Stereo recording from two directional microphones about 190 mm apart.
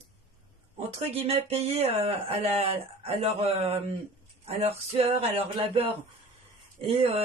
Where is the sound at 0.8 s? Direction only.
35° right (ahead or behind).